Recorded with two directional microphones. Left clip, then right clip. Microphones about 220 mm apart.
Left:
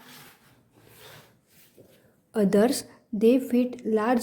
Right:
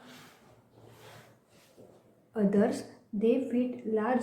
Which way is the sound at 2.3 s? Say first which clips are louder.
Left 6 dB; 45° left (ahead or behind).